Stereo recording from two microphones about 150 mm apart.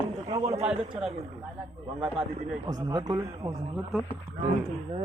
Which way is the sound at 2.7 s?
25° right (ahead or behind).